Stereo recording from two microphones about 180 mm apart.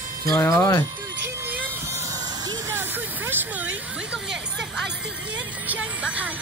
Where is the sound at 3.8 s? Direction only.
5° right (ahead or behind).